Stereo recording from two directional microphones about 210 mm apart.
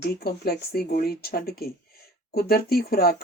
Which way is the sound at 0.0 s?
50° left (ahead or behind).